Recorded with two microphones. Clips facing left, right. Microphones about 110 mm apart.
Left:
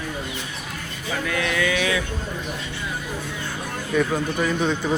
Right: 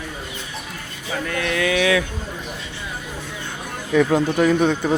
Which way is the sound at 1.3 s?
50° right (ahead or behind).